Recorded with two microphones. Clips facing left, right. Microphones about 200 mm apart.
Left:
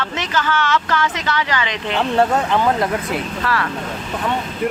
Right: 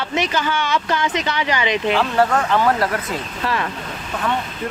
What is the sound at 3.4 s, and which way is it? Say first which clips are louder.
Speech: right 1 dB; 20° right (ahead or behind).